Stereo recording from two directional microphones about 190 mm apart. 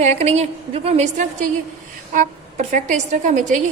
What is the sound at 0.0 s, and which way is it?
A woman's voice, 35° right (ahead or behind).